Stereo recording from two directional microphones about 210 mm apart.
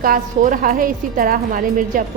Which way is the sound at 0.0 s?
40° right (ahead or behind).